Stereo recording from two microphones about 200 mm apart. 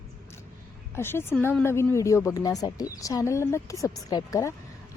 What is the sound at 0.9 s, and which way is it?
A woman's voice, 10° left (ahead or behind).